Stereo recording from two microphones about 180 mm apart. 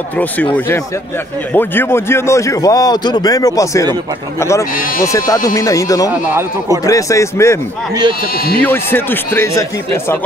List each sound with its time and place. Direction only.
1.5 s speech: 10° left (ahead or behind)
6.1 s speech: 10° right (ahead or behind)
6.9 s speech: 15° left (ahead or behind)
8.6 s speech: 10° left (ahead or behind)